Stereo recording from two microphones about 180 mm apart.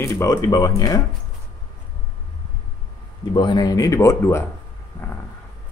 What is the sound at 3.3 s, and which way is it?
Speech, 25° left (ahead or behind).